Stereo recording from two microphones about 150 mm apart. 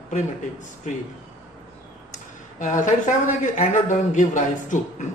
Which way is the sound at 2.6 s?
60° left (ahead or behind).